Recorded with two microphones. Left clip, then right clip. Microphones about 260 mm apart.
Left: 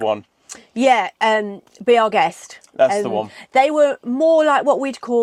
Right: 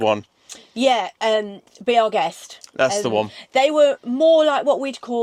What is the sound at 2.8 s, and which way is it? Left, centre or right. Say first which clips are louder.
Speech: left 4 dB; right.